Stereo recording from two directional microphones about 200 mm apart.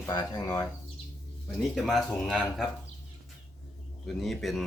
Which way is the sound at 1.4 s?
Centre (ahead or behind).